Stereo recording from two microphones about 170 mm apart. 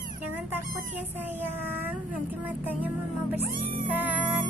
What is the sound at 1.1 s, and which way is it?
Speech, 10° right (ahead or behind).